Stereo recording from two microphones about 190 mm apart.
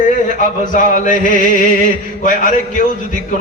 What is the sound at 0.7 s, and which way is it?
A man's voice, 45° left (ahead or behind).